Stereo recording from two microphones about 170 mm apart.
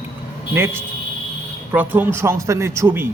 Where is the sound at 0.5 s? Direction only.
15° right (ahead or behind).